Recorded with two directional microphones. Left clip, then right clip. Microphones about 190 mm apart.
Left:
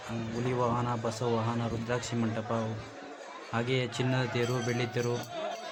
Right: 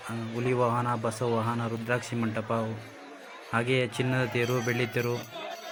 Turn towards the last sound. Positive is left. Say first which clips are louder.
# right 3 dB
turn(degrees=-10)  # may be behind; listen again after turning